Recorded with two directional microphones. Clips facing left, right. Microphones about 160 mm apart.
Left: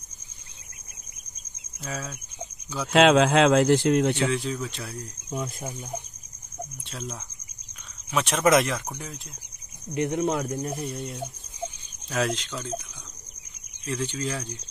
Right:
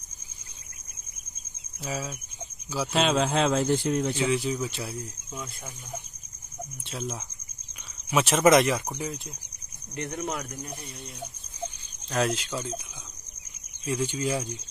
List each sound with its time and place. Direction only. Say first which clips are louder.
1.8 s speech: right 2 dB; 5° right (ahead or behind)
2.9 s speech: left 7 dB; 90° left; by 4.3 s 70° left (ahead or behind)
4.3 s speech: right 1 dB; 10° right (ahead or behind)
6.9 s speech: right 6 dB; centre (ahead or behind)
9.9 s speech: left 7 dB; 25° left (ahead or behind)
10.7 s speech: left 9 dB; centre (ahead or behind)
11.0 s speech: left 7 dB; 60° left (ahead or behind)
12.1 s speech: even; centre (ahead or behind)
13.8 s speech: right 2 dB; 10° right (ahead or behind)